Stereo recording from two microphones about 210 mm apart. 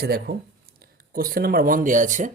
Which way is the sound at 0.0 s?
45° right (ahead or behind).